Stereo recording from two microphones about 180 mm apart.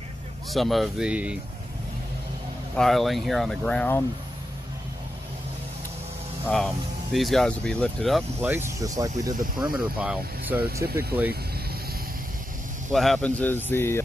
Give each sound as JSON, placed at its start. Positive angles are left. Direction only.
{"t": 0.5, "sound": "speech", "side_deg": 0}
{"t": 2.7, "sound": "speech", "side_deg": 0}
{"t": 6.4, "sound": "speech", "side_deg": 0}
{"t": 8.4, "sound": "speech", "side_deg": -10}
{"t": 9.7, "sound": "speech", "side_deg": -5}
{"t": 10.9, "sound": "speech", "side_deg": -60}
{"t": 12.9, "sound": "speech", "side_deg": 0}